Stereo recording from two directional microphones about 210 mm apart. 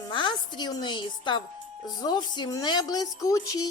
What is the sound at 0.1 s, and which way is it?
A woman's voice, 20° left (ahead or behind).